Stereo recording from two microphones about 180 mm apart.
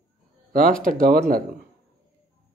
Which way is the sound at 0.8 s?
50° right (ahead or behind).